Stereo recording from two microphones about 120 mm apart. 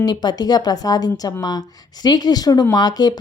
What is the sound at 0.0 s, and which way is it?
Speech, 35° left (ahead or behind).